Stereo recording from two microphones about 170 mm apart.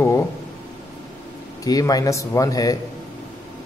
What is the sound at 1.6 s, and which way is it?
A man's voice, 20° left (ahead or behind).